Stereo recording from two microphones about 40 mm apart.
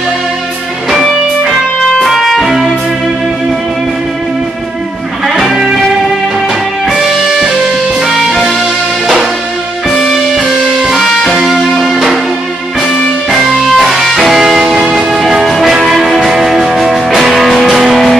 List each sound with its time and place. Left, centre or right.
0.8 s music: centre
6.9 s music: centre
8.1 s music: centre
8.5 s music: centre
13.3 s music: centre